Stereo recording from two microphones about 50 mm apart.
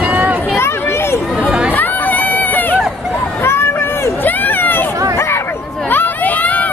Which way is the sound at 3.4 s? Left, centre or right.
Left.